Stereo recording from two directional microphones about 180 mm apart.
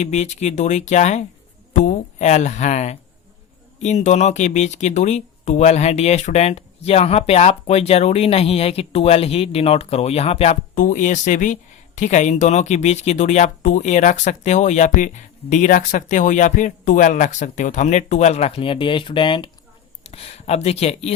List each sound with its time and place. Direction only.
0.0 s speech: 40° left (ahead or behind)